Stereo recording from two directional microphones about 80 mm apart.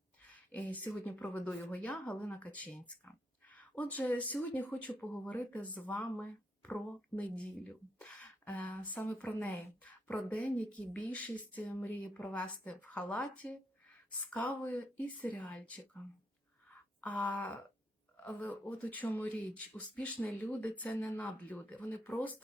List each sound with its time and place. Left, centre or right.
0.2 s a sound: centre
1.0 s speech: left
1.7 s speech: centre
2.0 s speech: left
16.6 s a sound: centre
18.4 s speech: left